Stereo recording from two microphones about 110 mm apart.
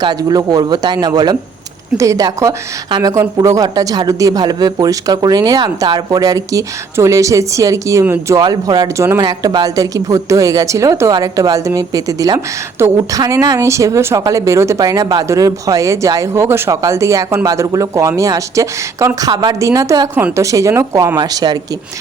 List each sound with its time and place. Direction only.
0.0 s speech: 40° right (ahead or behind); by 8.4 s 25° right (ahead or behind)
8.4 s speech: 40° right (ahead or behind)
19.3 s speech: 40° right (ahead or behind)